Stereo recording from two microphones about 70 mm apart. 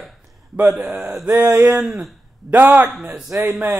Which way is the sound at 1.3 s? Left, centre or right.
Right.